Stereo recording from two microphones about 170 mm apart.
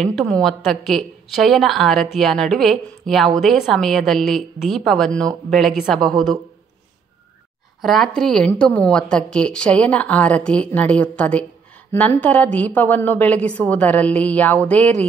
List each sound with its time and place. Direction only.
0.0 s a woman's voice: 5° left (ahead or behind)
7.8 s a woman's voice: centre (ahead or behind)